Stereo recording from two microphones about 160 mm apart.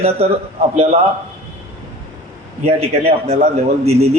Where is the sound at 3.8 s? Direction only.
40° right (ahead or behind).